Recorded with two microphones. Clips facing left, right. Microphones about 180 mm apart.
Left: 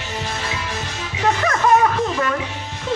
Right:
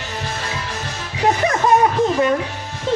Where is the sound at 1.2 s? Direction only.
20° right (ahead or behind).